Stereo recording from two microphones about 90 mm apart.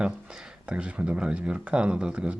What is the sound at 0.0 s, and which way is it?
Speech, 10° right (ahead or behind).